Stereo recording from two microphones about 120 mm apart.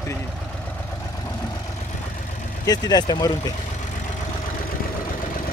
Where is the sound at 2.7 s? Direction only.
35° left (ahead or behind).